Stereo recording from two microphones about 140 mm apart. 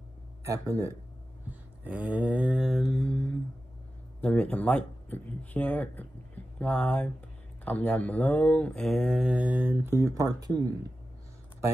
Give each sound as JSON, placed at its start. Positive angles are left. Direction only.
{"t": 0.4, "sound": "speech", "side_deg": -20}
{"t": 1.5, "sound": "mantra", "side_deg": -10}
{"t": 4.2, "sound": "speech", "side_deg": 10}